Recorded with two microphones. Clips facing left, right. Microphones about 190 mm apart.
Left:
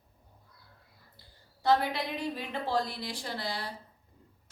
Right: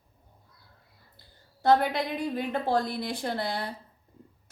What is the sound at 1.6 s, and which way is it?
Speech, 50° right (ahead or behind).